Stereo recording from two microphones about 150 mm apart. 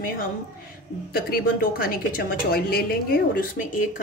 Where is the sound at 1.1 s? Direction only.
80° left.